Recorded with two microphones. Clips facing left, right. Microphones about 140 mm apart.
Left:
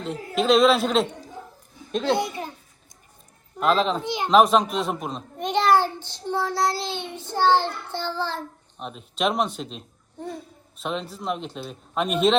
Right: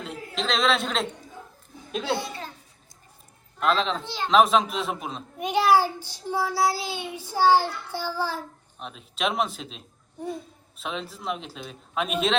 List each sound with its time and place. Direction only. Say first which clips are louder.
0.0 s a man's voice: left 6 dB; centre (ahead or behind)
2.1 s a child's voice: left 6 dB; 20° left (ahead or behind)
3.6 s a man's voice: left 3 dB; centre (ahead or behind)
4.0 s speech: left 4 dB; 15° left (ahead or behind)
4.3 s a child's voice: left 2 dB; centre (ahead or behind)